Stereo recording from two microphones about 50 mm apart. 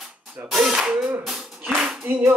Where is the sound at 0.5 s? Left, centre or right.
Centre.